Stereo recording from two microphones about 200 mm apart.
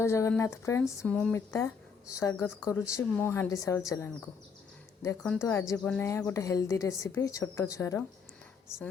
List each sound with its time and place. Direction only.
0.0 s speech: 15° left (ahead or behind)